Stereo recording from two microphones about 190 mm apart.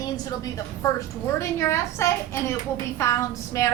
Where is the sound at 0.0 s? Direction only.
20° left (ahead or behind).